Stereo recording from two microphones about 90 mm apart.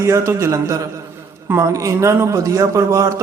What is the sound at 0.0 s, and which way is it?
Speech, 30° right (ahead or behind).